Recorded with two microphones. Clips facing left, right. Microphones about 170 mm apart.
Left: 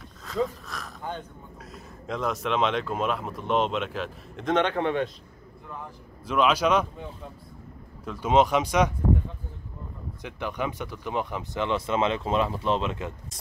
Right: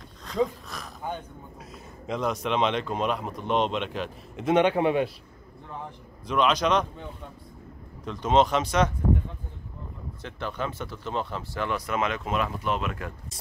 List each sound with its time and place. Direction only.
0.2 s speech: centre (ahead or behind)
6.2 s speech: 5° left (ahead or behind)
8.0 s speech: 10° left (ahead or behind)
10.2 s speech: 15° left (ahead or behind)